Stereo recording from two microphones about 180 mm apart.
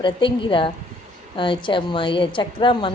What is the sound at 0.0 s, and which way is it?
A woman's voice, 25° left (ahead or behind).